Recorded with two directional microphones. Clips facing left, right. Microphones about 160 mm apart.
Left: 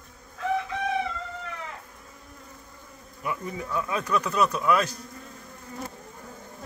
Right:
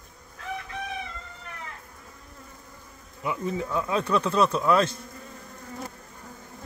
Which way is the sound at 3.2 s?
20° right (ahead or behind).